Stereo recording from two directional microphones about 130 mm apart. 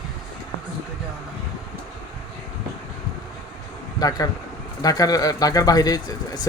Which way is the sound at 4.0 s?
30° left (ahead or behind).